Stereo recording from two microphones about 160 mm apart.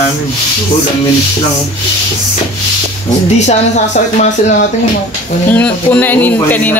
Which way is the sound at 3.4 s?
50° left (ahead or behind).